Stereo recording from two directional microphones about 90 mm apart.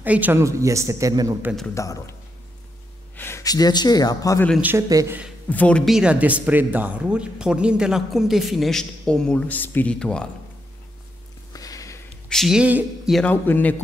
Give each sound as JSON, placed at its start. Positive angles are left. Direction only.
{"t": 0.0, "sound": "speech", "side_deg": -20}
{"t": 0.4, "sound": "speech", "side_deg": -35}
{"t": 1.8, "sound": "a man's voice", "side_deg": 35}
{"t": 3.2, "sound": "a sound", "side_deg": 25}
{"t": 3.4, "sound": "speech", "side_deg": 45}
{"t": 4.7, "sound": "speech", "side_deg": -35}
{"t": 5.5, "sound": "speech", "side_deg": 15}
{"t": 5.9, "sound": "speech", "side_deg": -10}
{"t": 11.5, "sound": "a sound", "side_deg": 40}
{"t": 12.3, "sound": "speech", "side_deg": 5}
{"t": 12.5, "sound": "speech", "side_deg": -15}
{"t": 13.2, "sound": "a man's voice", "side_deg": 20}